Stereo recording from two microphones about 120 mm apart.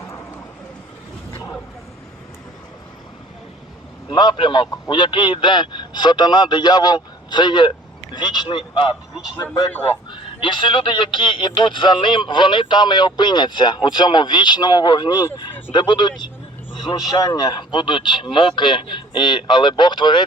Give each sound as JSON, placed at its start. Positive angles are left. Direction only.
{"t": 4.1, "sound": "a man's voice", "side_deg": 40}